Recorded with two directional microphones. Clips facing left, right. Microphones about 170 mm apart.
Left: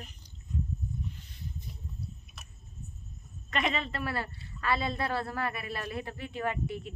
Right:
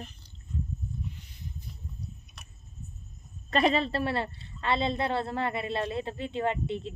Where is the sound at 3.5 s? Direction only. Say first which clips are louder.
Right 7 dB; 35° right (ahead or behind).